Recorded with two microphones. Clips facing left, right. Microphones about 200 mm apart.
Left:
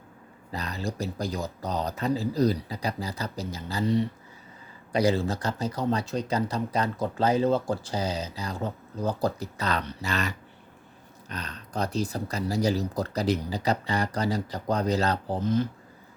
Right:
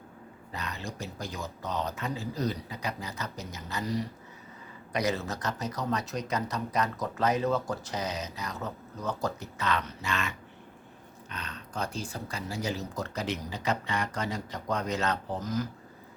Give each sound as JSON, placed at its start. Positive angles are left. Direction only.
{"t": 0.5, "sound": "speech", "side_deg": 35}